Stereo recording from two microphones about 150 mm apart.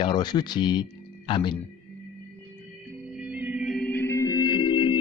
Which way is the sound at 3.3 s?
10° right (ahead or behind).